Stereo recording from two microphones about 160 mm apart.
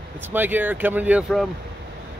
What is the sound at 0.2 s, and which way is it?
Speech, 10° right (ahead or behind).